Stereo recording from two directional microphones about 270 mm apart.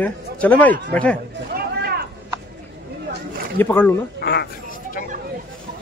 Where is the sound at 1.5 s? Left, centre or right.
Right.